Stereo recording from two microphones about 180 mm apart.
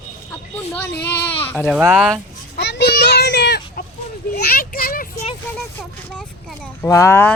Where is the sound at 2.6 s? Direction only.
70° left (ahead or behind).